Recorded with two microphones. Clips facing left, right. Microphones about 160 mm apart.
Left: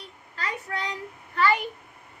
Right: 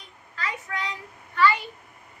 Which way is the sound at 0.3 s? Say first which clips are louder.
Even; 35° left (ahead or behind).